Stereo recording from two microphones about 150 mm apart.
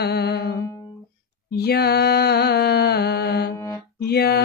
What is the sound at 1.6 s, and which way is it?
Mantra, 90° left.